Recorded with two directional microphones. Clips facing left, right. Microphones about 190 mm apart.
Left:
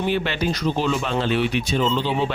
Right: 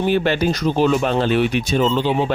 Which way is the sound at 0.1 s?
45° right (ahead or behind).